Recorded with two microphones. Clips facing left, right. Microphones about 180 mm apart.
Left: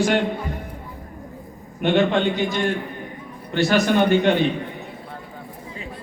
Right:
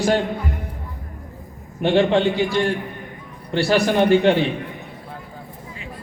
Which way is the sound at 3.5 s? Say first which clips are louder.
Right 1 dB; 30° right (ahead or behind).